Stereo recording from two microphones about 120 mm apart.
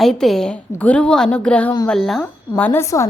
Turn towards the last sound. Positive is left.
turn(degrees=25)  # may be behind; listen again after turning